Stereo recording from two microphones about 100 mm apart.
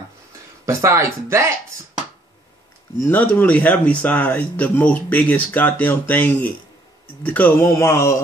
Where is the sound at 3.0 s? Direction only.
20° left (ahead or behind).